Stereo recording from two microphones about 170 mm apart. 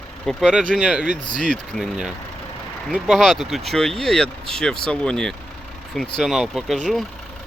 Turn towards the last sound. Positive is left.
turn(degrees=0)  # may be behind; listen again after turning